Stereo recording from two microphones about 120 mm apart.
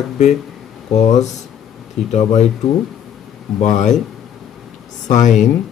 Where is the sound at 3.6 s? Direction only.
90° left.